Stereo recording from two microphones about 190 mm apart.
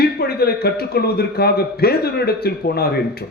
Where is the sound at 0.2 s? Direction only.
55° left (ahead or behind).